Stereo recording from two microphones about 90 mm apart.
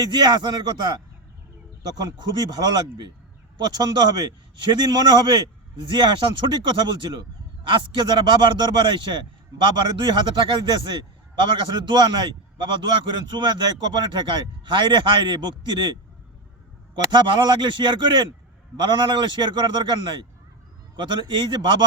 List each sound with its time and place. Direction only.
0.0 s a man's voice: 55° right (ahead or behind)